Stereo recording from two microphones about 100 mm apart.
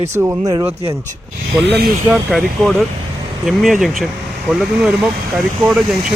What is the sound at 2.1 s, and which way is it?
Speech, centre (ahead or behind).